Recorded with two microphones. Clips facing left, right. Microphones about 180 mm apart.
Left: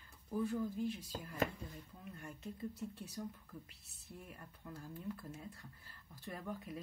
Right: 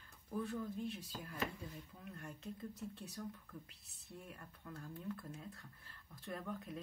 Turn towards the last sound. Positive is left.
turn(degrees=5)  # may be behind; listen again after turning